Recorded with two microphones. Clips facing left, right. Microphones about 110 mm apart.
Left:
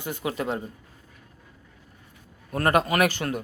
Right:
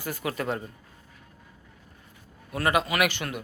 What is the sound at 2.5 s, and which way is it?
Speech, 45° left (ahead or behind).